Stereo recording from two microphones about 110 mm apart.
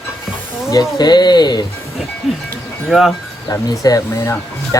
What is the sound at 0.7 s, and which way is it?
Speech, 35° left (ahead or behind).